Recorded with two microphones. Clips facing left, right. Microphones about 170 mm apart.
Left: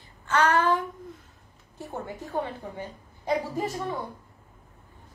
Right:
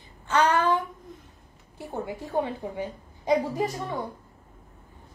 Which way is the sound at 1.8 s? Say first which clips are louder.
Right 3 dB; 15° right (ahead or behind).